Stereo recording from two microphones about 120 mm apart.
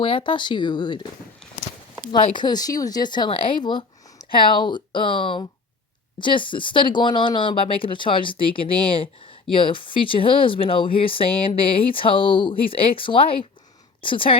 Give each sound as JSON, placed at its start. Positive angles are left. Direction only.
{"t": 0.0, "sound": "speech", "side_deg": 45}
{"t": 2.3, "sound": "speech", "side_deg": 35}